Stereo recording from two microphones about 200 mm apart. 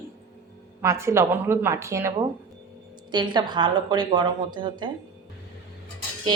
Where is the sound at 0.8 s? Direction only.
15° right (ahead or behind).